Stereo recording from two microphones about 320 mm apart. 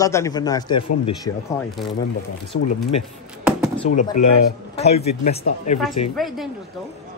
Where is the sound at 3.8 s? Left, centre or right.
Left.